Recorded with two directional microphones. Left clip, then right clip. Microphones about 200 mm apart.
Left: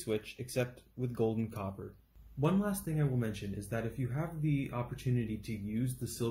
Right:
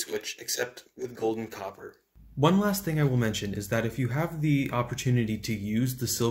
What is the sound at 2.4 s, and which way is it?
Speech, 35° right (ahead or behind).